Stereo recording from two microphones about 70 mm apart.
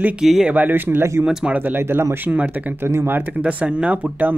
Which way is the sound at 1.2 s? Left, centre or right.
Centre.